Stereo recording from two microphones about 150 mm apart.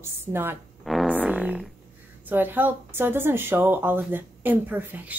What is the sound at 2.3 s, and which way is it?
Speech, 15° right (ahead or behind).